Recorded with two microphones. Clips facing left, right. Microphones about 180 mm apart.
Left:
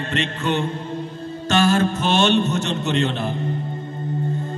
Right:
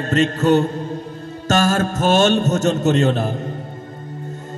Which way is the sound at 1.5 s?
45° right (ahead or behind).